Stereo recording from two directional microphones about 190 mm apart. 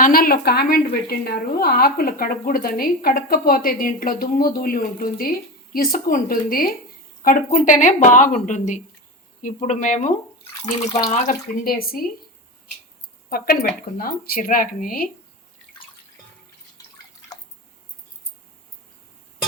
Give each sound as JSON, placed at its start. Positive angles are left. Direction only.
{"t": 0.0, "sound": "a woman's voice", "side_deg": 50}
{"t": 13.3, "sound": "a woman's voice", "side_deg": 50}